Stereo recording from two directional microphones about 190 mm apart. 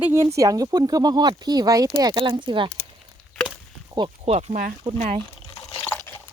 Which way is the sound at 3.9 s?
30° right (ahead or behind).